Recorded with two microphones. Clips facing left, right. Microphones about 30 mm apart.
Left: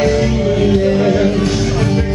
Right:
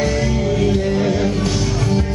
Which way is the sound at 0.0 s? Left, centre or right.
Centre.